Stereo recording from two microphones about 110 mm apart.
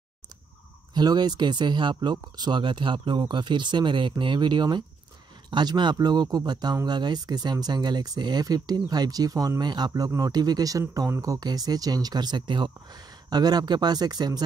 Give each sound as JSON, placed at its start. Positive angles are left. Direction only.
{"t": 0.9, "sound": "speech", "side_deg": -40}